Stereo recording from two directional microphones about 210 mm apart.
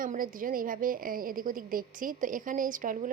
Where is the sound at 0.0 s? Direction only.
40° right (ahead or behind).